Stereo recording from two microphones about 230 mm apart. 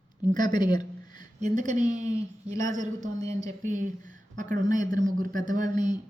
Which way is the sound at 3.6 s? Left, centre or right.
Right.